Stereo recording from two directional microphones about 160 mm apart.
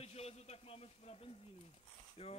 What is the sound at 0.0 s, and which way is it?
A man's voice, 40° left (ahead or behind).